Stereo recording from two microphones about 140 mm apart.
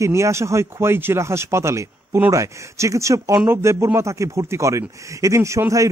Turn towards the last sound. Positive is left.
turn(degrees=-20)  # may be behind; listen again after turning